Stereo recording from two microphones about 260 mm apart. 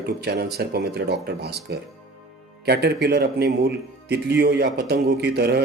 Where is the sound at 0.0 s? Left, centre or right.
Right.